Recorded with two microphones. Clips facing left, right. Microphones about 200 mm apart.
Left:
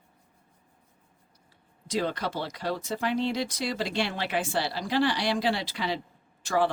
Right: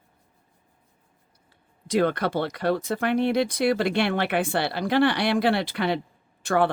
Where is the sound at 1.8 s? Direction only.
60° right (ahead or behind).